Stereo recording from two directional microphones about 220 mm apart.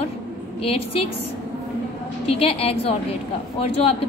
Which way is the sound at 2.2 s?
25° left (ahead or behind).